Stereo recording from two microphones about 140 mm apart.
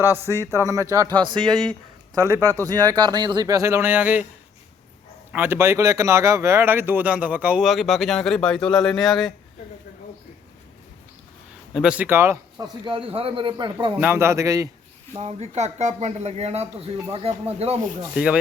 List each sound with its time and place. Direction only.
0.0 s speech: 15° right (ahead or behind)
1.2 s a man's voice: 35° right (ahead or behind)
1.5 s speech: 5° left (ahead or behind)
2.1 s speech: 20° right (ahead or behind)
5.3 s speech: 15° right (ahead or behind); by 9.3 s centre (ahead or behind)
11.7 s speech: 5° right (ahead or behind)
12.8 s a man's voice: 40° right (ahead or behind)
14.0 s speech: 15° right (ahead or behind)
15.1 s speech: 50° right (ahead or behind)
18.1 s speech: 5° right (ahead or behind)